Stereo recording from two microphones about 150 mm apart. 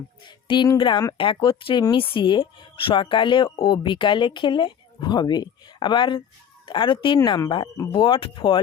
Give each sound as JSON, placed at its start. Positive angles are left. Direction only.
{"t": 0.3, "sound": "speech", "side_deg": 30}